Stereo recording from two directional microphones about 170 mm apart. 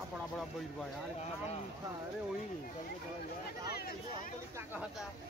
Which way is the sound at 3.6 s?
65° left (ahead or behind).